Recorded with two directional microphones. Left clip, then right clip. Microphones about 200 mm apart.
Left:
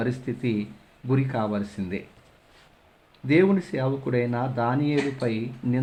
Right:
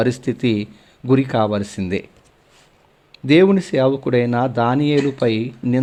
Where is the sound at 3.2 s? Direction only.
35° right (ahead or behind).